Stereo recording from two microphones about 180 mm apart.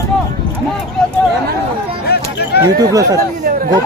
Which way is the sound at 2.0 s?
65° left (ahead or behind).